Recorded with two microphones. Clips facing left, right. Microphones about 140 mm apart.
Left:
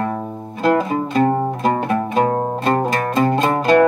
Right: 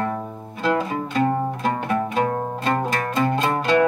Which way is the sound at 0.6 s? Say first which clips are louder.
Left 5 dB; 45° left (ahead or behind).